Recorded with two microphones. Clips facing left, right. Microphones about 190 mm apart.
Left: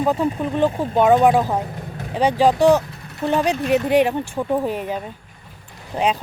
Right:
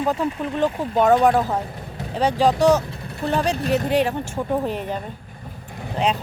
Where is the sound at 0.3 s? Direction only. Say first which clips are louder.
Left 3 dB; 30° left (ahead or behind).